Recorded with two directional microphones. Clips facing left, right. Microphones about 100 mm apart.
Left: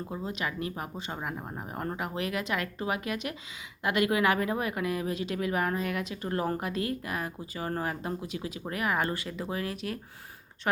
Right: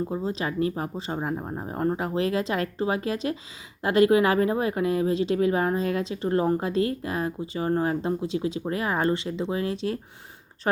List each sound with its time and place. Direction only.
0.1 s speech: 30° right (ahead or behind)